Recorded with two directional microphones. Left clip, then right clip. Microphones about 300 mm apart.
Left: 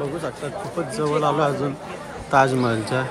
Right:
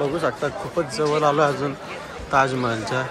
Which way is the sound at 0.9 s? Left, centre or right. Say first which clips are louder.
Right 1 dB; centre.